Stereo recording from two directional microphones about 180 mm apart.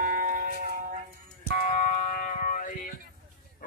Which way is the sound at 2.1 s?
45° left (ahead or behind).